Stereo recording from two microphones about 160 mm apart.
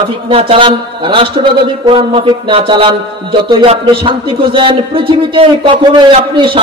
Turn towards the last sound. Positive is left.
turn(degrees=-30)  # may be behind; listen again after turning